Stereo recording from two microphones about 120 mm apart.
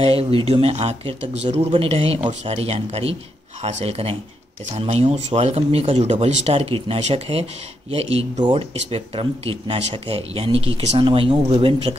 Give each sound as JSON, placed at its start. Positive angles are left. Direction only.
{"t": 0.0, "sound": "speech", "side_deg": -55}
{"t": 11.0, "sound": "speech", "side_deg": -45}